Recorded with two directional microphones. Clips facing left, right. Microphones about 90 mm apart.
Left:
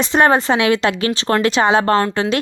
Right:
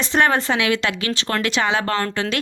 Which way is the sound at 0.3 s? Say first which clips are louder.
Left 5 dB; 35° left (ahead or behind).